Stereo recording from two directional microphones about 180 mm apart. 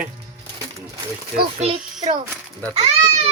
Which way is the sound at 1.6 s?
40° right (ahead or behind).